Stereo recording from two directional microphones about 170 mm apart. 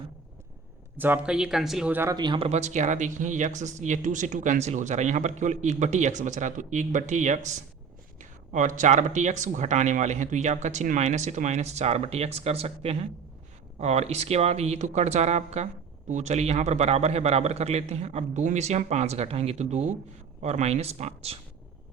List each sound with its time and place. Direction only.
0.9 s speech: 10° right (ahead or behind)
2.1 s speech: 25° right (ahead or behind)
2.5 s speech: 45° right (ahead or behind)